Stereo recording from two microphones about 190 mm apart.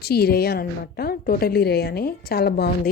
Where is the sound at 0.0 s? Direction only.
55° left (ahead or behind).